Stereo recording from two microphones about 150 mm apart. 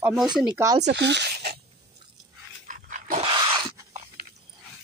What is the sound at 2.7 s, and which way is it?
Dog, 60° right (ahead or behind).